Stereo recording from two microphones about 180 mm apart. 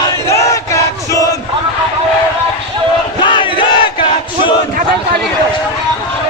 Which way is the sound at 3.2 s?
25° left (ahead or behind).